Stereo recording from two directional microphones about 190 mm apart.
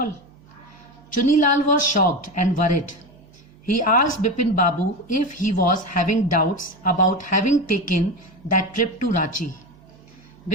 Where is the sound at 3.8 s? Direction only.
45° left (ahead or behind).